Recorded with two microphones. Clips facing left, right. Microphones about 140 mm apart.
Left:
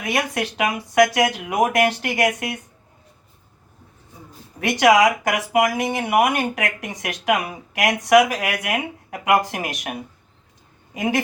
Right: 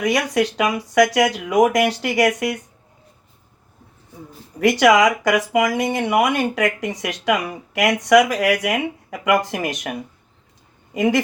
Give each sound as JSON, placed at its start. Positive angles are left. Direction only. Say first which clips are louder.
{"t": 0.0, "sound": "speech", "louder": "right 5 dB", "side_deg": -90}
{"t": 4.6, "sound": "speech", "louder": "right 1 dB", "side_deg": -90}
{"t": 10.9, "sound": "speech", "louder": "right 4 dB", "side_deg": -90}